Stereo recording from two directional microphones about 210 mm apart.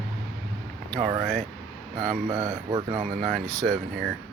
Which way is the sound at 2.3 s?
15° right (ahead or behind).